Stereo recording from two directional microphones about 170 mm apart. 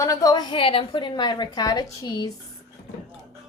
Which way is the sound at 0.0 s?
20° left (ahead or behind).